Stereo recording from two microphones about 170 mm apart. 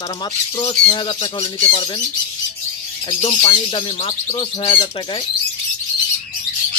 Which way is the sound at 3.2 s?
30° left (ahead or behind).